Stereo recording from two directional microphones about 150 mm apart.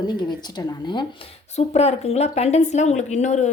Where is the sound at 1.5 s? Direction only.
45° left (ahead or behind).